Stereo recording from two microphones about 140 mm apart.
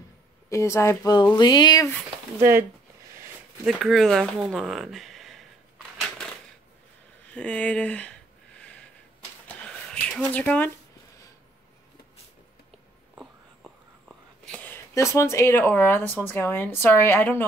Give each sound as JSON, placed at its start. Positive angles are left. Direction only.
{"t": 0.5, "sound": "a woman's voice", "side_deg": 20}
{"t": 3.6, "sound": "speech", "side_deg": 0}
{"t": 4.6, "sound": "a sound", "side_deg": 0}
{"t": 5.9, "sound": "crushing", "side_deg": 5}
{"t": 7.3, "sound": "a sound", "side_deg": 10}
{"t": 13.1, "sound": "whispering", "side_deg": -5}
{"t": 14.4, "sound": "speech", "side_deg": 10}